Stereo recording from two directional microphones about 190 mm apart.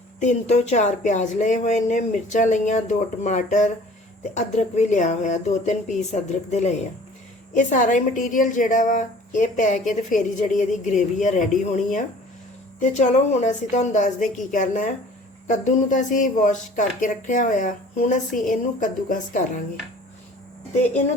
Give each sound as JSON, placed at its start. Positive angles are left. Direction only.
{"t": 0.2, "sound": "a woman's voice", "side_deg": 35}